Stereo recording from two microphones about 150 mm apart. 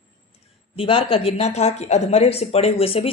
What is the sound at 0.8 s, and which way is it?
Speech, 40° left (ahead or behind).